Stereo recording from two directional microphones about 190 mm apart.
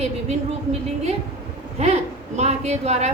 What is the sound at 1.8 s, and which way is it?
Speech, 35° right (ahead or behind).